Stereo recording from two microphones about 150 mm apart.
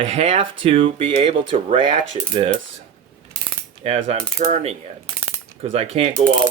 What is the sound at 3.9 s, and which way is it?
Speech, 45° right (ahead or behind).